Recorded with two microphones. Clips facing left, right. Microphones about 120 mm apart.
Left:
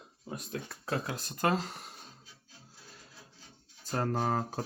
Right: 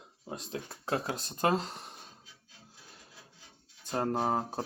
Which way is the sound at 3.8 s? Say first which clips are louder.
Right 1 dB; 20° right (ahead or behind).